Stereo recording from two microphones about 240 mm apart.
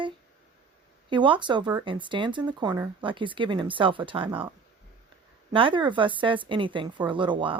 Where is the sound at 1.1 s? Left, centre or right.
Centre.